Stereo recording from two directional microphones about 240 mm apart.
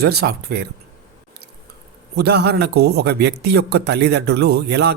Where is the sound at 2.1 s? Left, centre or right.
Right.